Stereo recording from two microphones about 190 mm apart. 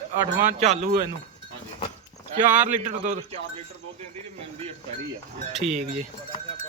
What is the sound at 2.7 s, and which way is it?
Speech, 40° right (ahead or behind).